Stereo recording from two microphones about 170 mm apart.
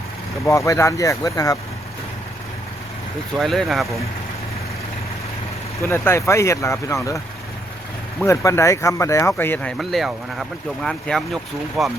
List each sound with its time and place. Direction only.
0.4 s speech: 20° left (ahead or behind)
3.3 s speech: centre (ahead or behind)
5.8 s speech: 15° left (ahead or behind)
8.2 s speech: 15° left (ahead or behind)
9.7 s speech: centre (ahead or behind)